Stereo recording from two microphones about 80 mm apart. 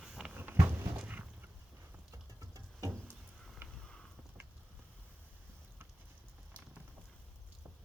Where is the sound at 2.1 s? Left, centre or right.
Right.